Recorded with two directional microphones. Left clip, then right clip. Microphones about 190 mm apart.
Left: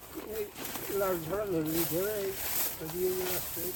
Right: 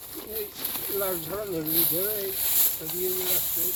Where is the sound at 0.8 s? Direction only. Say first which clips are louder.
Even; centre (ahead or behind).